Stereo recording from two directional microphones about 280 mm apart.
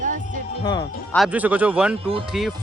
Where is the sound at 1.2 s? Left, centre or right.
Centre.